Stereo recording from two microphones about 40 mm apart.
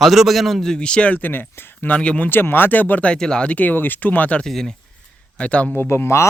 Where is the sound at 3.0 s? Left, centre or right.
Left.